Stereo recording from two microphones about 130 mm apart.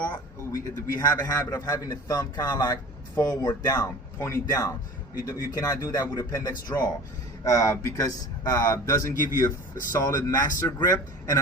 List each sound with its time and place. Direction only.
0.1 s speech: 30° left (ahead or behind)